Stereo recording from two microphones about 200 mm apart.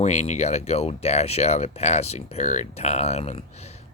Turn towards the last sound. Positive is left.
turn(degrees=30)  # may be behind; listen again after turning